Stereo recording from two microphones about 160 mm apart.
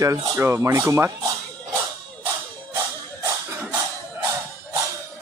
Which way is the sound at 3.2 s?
20° right (ahead or behind).